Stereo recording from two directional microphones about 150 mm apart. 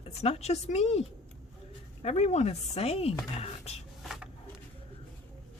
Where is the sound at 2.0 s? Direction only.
45° left (ahead or behind).